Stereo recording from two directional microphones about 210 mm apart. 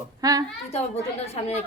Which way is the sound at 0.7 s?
30° left (ahead or behind).